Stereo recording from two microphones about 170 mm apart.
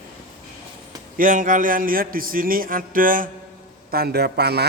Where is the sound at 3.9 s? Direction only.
65° right (ahead or behind).